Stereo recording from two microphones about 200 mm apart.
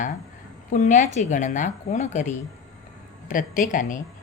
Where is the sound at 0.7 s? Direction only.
40° left (ahead or behind).